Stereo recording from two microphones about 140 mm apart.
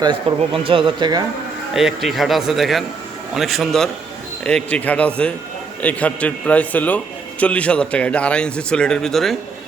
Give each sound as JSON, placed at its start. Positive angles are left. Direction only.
{"t": 0.0, "sound": "speech", "side_deg": -40}
{"t": 1.7, "sound": "a man's voice", "side_deg": 0}